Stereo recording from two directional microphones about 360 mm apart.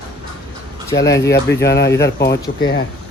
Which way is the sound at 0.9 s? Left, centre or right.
Centre.